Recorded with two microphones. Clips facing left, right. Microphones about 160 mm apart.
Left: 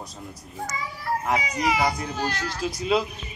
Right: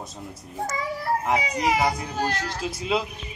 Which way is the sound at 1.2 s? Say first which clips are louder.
Left 1 dB; 25° right (ahead or behind).